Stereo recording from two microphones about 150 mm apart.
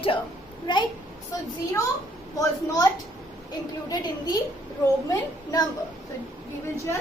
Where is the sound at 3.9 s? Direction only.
25° left (ahead or behind).